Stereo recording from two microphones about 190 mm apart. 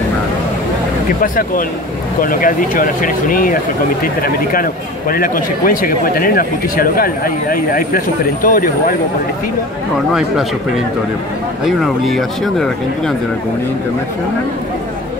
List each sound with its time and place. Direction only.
1.2 s a man's voice: 45° left (ahead or behind)
11.6 s speech: centre (ahead or behind)